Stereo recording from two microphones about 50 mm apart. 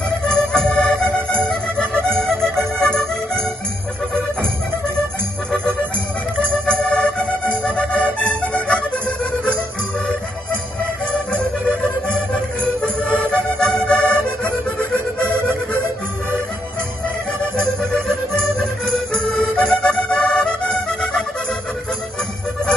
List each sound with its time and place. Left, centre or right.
0.3 s organ: centre
1.5 s music: centre
6.7 s organ: centre
7.9 s music: left
12.8 s music: left
18.3 s music: centre